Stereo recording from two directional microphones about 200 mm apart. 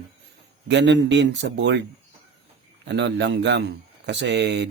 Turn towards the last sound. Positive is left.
turn(degrees=-60)  # may be behind; listen again after turning